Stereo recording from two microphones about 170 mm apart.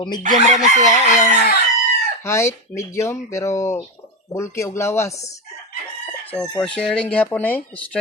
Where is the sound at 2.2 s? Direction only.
15° left (ahead or behind).